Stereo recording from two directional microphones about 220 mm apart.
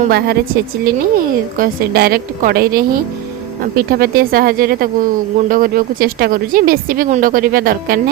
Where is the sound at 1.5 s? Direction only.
40° right (ahead or behind).